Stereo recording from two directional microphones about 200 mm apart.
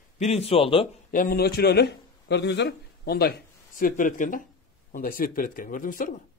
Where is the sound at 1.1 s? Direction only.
45° left (ahead or behind).